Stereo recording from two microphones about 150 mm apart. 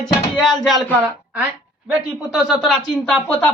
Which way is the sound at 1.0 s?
10° right (ahead or behind).